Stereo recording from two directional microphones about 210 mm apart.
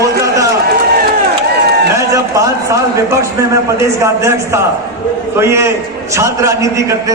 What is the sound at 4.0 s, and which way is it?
A man's voice, 15° right (ahead or behind).